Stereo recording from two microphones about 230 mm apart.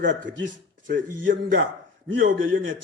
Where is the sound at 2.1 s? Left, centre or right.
Right.